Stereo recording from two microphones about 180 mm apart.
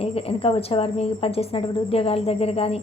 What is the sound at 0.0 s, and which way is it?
A woman's voice, 35° left (ahead or behind).